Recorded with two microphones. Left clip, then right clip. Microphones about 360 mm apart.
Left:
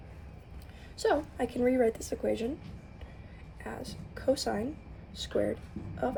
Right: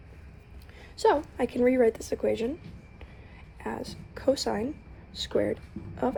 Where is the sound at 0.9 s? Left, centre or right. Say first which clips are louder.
Right 5 dB; centre.